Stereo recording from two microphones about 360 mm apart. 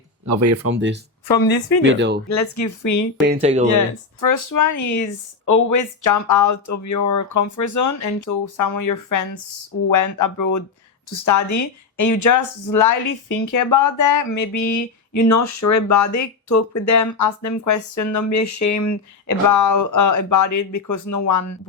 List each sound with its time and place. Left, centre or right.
0.3 s speech: right
0.7 s speech: right
2.3 s speech: left
3.4 s speech: centre
4.2 s speech: left